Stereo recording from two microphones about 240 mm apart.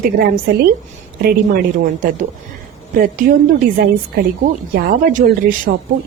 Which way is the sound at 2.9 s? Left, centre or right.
Right.